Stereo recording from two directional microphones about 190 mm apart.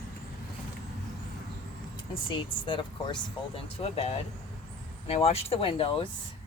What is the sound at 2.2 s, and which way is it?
Speech, 25° left (ahead or behind).